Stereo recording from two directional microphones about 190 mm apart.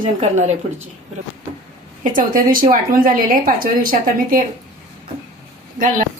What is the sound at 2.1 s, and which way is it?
Speech, 45° right (ahead or behind).